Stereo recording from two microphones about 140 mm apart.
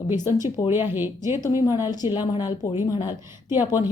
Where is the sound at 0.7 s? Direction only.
15° right (ahead or behind).